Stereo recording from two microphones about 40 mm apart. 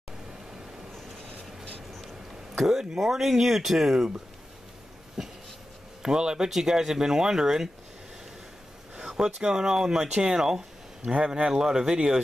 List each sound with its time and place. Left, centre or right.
2.5 s speech: centre
6.0 s speech: centre
8.9 s speech: centre